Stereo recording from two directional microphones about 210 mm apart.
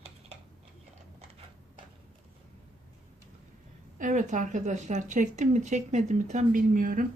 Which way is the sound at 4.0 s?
35° right (ahead or behind).